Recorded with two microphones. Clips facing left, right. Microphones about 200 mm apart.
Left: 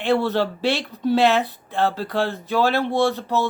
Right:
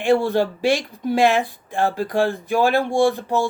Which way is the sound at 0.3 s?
15° right (ahead or behind).